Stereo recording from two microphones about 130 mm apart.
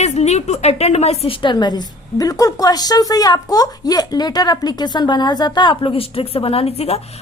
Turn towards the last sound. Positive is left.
turn(degrees=50)  # may be behind; listen again after turning